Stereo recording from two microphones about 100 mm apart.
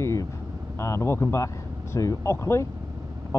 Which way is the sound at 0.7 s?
30° left (ahead or behind).